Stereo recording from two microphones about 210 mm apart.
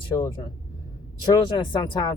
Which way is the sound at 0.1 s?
30° left (ahead or behind).